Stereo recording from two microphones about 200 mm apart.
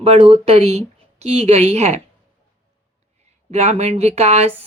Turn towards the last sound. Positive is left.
turn(degrees=-35)  # may be behind; listen again after turning